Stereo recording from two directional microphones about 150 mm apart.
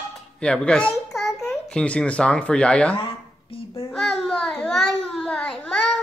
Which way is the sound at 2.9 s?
35° left (ahead or behind).